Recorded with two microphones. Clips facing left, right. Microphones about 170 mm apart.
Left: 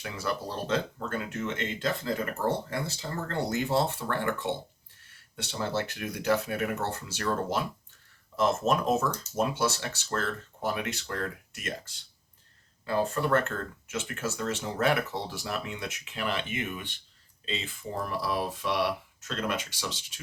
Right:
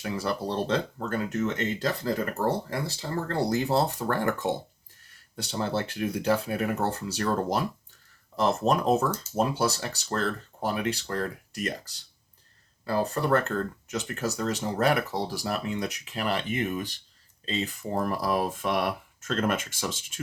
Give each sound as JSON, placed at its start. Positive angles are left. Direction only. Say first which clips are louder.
{"t": 0.0, "sound": "speech", "louder": "right 4 dB", "side_deg": -30}